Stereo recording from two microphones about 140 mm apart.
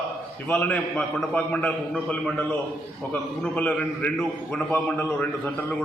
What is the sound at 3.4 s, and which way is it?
A man's voice, 10° left (ahead or behind).